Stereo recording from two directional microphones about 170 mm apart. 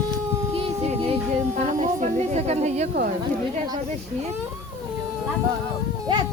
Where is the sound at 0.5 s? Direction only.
35° right (ahead or behind).